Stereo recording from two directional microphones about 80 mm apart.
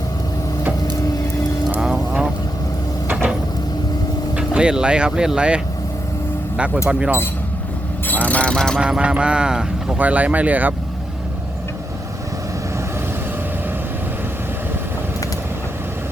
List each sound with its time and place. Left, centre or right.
1.8 s frog: centre
4.4 s speech: centre
6.8 s speech: centre
8.0 s vehicle: left
8.8 s speech: centre